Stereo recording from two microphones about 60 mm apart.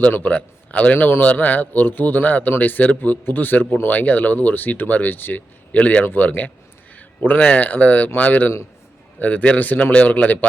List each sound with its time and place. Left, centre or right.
0.1 s speech: left
0.9 s speech: left
1.2 s speech: left